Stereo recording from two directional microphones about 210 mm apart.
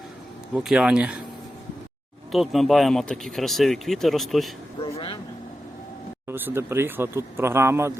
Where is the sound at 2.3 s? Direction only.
Centre (ahead or behind).